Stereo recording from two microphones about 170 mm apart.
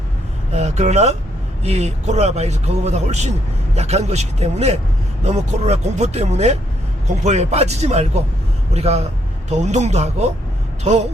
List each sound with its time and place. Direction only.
0.5 s speech: 40° right (ahead or behind)